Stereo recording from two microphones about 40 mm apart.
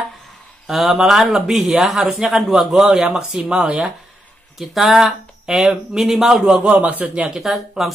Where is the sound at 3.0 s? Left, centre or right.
Centre.